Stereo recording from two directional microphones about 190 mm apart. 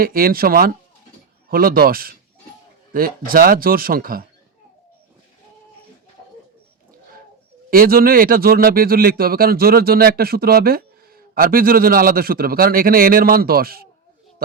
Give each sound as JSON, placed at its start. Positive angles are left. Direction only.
{"t": 0.0, "sound": "a man's voice", "side_deg": -50}
{"t": 7.7, "sound": "a man's voice", "side_deg": -50}